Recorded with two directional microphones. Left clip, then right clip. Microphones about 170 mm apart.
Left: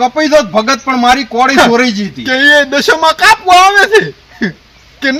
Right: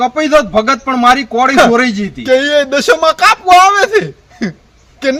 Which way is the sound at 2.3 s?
55° right (ahead or behind).